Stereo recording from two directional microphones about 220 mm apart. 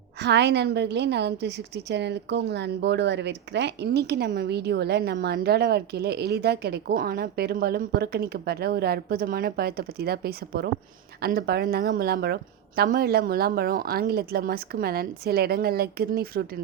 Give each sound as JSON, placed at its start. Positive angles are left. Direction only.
{"t": 0.2, "sound": "a woman's voice", "side_deg": -50}